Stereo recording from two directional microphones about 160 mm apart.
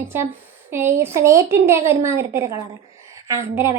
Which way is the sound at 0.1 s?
15° right (ahead or behind).